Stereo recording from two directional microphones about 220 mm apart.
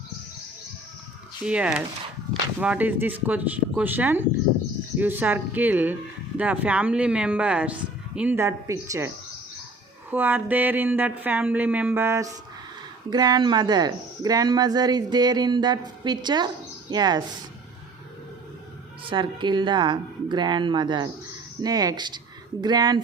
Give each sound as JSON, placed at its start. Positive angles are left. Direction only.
{"t": 1.5, "sound": "speech", "side_deg": -5}
{"t": 19.1, "sound": "speech", "side_deg": -20}